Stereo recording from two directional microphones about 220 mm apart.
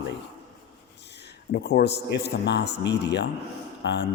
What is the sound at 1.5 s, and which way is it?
A man's voice, 45° left (ahead or behind).